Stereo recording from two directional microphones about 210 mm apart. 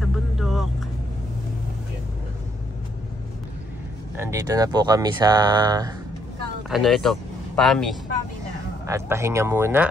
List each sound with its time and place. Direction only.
0.0 s vehicle: centre (ahead or behind)
4.2 s speech: 15° right (ahead or behind)
6.7 s speech: centre (ahead or behind)
8.8 s speech: 15° right (ahead or behind)